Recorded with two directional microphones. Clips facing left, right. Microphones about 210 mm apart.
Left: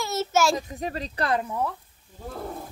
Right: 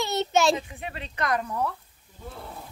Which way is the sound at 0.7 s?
40° left (ahead or behind).